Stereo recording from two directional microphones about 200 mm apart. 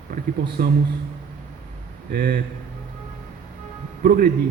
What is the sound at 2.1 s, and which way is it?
Speech, 50° right (ahead or behind).